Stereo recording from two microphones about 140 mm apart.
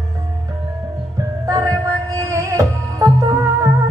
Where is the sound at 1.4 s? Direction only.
25° right (ahead or behind).